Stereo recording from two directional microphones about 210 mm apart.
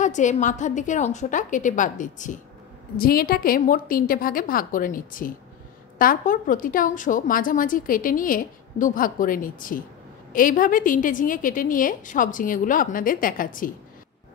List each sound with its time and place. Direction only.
0.0 s a woman's voice: 35° left (ahead or behind)